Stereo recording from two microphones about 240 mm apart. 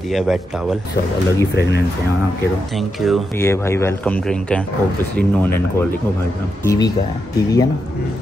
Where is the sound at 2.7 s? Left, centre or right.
Centre.